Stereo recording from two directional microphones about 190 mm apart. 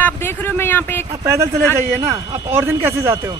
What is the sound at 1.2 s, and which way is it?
Speech, 15° right (ahead or behind).